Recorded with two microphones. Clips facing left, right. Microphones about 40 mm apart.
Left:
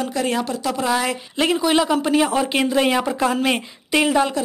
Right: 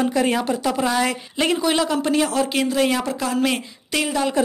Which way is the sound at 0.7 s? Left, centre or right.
Centre.